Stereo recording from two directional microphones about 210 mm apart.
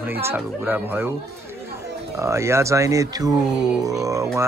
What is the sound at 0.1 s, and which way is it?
A man's voice, 10° right (ahead or behind).